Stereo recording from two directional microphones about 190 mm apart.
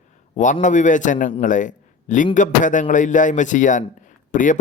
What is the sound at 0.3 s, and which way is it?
A man's voice, 40° left (ahead or behind).